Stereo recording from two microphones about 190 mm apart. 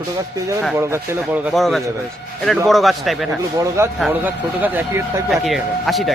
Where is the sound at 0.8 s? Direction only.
15° right (ahead or behind).